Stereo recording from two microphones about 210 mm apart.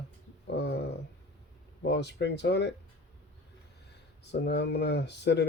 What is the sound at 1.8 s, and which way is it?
Speech, 55° left (ahead or behind).